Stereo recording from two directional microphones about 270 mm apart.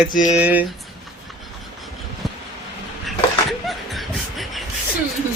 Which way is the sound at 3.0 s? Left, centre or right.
Centre.